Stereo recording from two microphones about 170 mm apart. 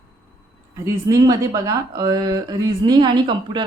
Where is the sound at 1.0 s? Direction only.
20° right (ahead or behind).